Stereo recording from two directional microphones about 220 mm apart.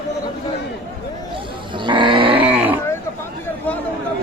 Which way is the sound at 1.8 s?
20° right (ahead or behind).